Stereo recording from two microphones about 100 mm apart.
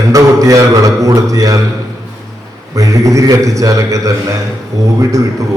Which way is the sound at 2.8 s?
35° right (ahead or behind).